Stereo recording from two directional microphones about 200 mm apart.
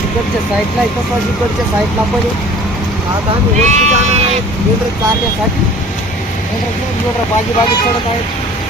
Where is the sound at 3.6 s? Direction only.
35° right (ahead or behind).